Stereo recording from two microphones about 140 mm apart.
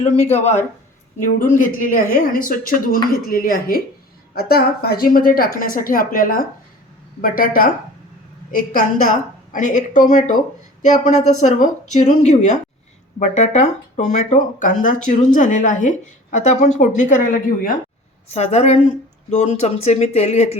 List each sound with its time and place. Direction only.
1.4 s a woman's voice: 70° left (ahead or behind); by 7.7 s 90° left
8.5 s a woman's voice: 70° left (ahead or behind)
18.3 s speech: 50° left (ahead or behind)